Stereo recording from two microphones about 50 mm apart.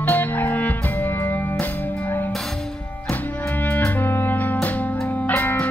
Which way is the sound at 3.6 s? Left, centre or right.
Left.